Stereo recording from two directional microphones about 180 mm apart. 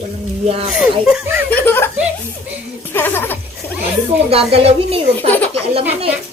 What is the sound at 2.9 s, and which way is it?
Speech, 10° left (ahead or behind).